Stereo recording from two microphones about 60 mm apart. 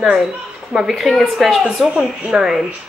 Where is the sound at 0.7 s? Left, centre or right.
Centre.